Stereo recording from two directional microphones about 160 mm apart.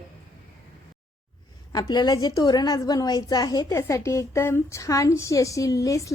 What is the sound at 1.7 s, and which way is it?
A woman's voice, 25° left (ahead or behind).